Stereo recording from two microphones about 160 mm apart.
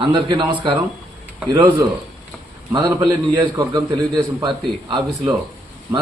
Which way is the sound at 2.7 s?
30° right (ahead or behind).